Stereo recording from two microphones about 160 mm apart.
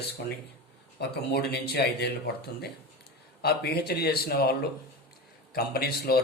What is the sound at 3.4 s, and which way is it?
Speech, 85° left.